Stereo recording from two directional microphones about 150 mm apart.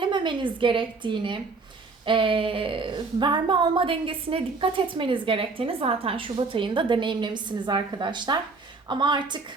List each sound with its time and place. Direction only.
0.0 s a woman's voice: 30° right (ahead or behind)